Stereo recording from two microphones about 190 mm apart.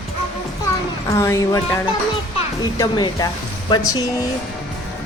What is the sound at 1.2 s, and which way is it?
Speech, 15° left (ahead or behind).